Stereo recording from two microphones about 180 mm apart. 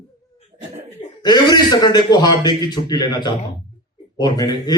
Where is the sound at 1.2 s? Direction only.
25° left (ahead or behind).